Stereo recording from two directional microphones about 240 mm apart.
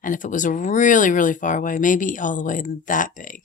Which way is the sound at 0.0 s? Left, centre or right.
Left.